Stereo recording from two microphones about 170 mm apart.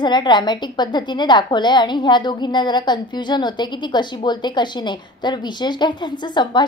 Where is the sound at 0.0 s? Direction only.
25° left (ahead or behind).